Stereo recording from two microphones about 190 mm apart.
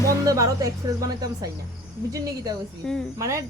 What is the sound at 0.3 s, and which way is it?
A woman's voice, 15° right (ahead or behind).